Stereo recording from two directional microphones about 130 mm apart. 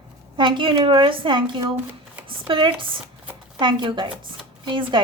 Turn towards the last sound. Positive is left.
turn(degrees=-40)  # may be behind; listen again after turning